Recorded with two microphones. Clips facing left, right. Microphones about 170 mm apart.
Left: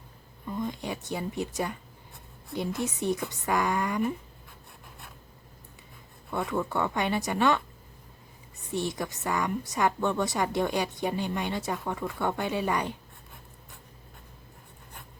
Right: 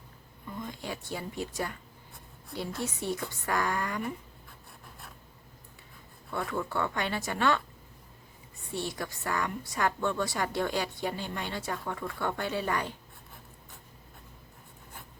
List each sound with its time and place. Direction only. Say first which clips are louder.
0.6 s a woman's voice: left 5 dB; 20° left (ahead or behind)
6.5 s a woman's voice: left 3 dB; 20° left (ahead or behind)
8.7 s a woman's voice: left 4 dB; 20° left (ahead or behind)